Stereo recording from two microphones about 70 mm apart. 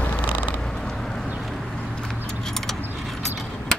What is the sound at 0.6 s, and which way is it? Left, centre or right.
Creak, centre.